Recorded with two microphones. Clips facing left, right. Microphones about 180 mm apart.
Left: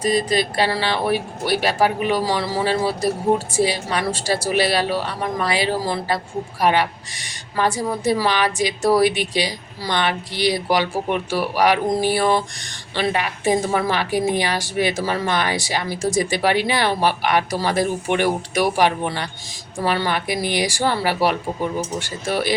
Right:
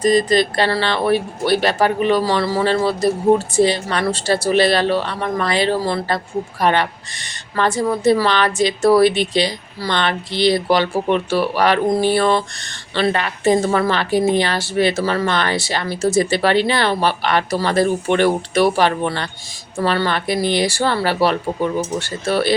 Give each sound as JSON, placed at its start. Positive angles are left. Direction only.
{"t": 0.0, "sound": "a woman's voice", "side_deg": 10}